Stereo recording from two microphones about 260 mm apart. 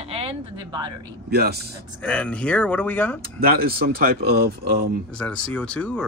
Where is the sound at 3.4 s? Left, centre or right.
Right.